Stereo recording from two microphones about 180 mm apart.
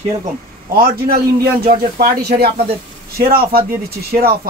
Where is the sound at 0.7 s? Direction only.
55° right (ahead or behind).